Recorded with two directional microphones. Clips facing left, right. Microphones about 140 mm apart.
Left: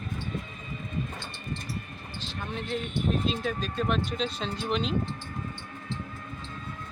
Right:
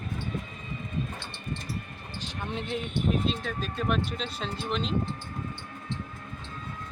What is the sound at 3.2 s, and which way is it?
Speech, 5° left (ahead or behind).